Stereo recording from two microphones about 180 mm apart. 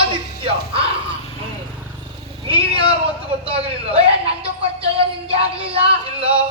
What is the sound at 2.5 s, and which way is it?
A woman's voice, 30° right (ahead or behind).